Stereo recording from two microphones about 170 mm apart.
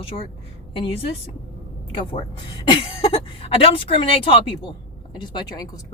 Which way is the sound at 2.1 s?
30° left (ahead or behind).